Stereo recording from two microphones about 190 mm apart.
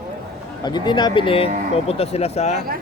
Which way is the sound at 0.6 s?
25° left (ahead or behind).